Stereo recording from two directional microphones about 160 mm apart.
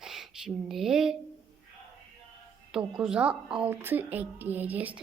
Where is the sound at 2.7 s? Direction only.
5° right (ahead or behind).